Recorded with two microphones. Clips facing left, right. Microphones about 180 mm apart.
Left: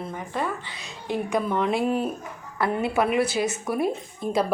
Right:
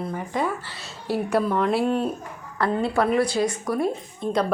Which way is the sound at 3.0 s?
5° left (ahead or behind).